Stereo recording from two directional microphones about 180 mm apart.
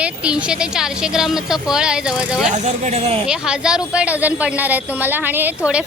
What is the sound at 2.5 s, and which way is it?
Speech, 40° right (ahead or behind).